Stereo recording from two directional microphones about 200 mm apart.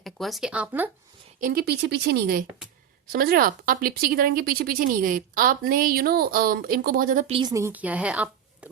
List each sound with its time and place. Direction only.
0.0 s speech: centre (ahead or behind)
1.4 s speech: 45° right (ahead or behind)
7.3 s a woman's voice: 20° right (ahead or behind)